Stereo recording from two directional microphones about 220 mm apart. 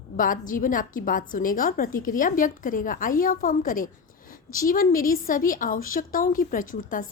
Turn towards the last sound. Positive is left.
turn(degrees=35)  # may be behind; listen again after turning